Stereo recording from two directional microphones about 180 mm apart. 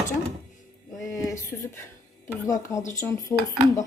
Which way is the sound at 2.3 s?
20° left (ahead or behind).